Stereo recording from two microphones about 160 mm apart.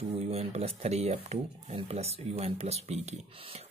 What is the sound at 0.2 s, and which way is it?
Speech, 40° right (ahead or behind).